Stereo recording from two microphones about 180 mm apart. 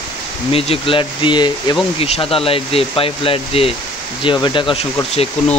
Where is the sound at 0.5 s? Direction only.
30° left (ahead or behind).